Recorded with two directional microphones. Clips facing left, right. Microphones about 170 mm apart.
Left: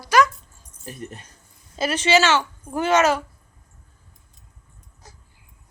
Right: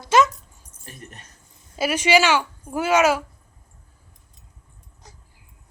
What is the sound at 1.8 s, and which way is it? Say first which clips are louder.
A woman's voice: even; 10° right (ahead or behind).